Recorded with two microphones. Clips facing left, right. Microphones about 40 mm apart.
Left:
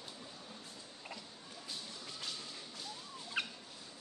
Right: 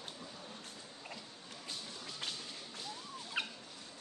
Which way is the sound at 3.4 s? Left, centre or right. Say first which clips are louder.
Even; centre.